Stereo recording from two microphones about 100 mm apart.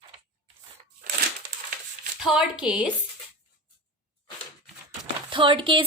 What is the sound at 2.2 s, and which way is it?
Speech, 5° right (ahead or behind).